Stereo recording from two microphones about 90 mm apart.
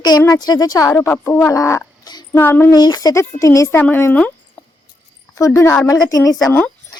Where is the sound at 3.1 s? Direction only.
35° left (ahead or behind).